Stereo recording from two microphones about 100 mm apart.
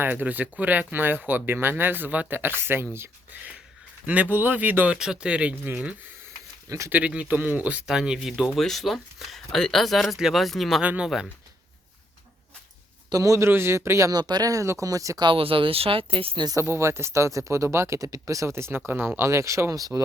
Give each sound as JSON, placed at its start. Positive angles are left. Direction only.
{"t": 0.0, "sound": "speech", "side_deg": -20}
{"t": 4.9, "sound": "speech", "side_deg": -10}
{"t": 6.7, "sound": "speech", "side_deg": -30}
{"t": 6.9, "sound": "speech", "side_deg": -15}
{"t": 13.1, "sound": "a man's voice", "side_deg": -35}
{"t": 14.1, "sound": "speech", "side_deg": -40}
{"t": 15.2, "sound": "speech", "side_deg": -60}
{"t": 16.6, "sound": "speech", "side_deg": -25}